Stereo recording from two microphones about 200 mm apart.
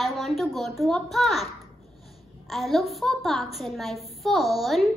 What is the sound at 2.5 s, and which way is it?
A woman's voice, centre (ahead or behind).